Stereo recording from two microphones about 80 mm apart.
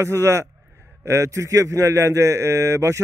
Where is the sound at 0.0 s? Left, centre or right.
Right.